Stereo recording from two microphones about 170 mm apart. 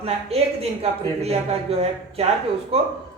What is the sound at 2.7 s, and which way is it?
Speech, 35° right (ahead or behind).